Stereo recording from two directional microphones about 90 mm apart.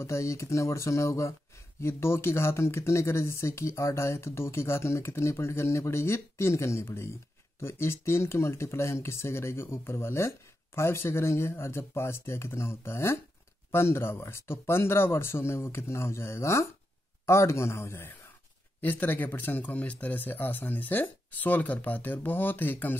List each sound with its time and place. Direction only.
0.0 s speech: 35° left (ahead or behind)